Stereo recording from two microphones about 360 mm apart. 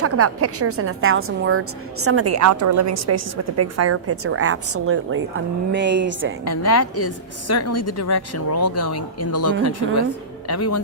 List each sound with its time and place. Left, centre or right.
0.0 s a woman's voice: right
6.5 s speech: left